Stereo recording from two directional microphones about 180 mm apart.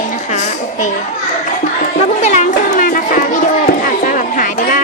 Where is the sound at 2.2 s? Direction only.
40° left (ahead or behind).